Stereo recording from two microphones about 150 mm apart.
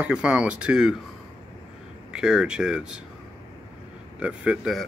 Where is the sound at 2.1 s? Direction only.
5° right (ahead or behind).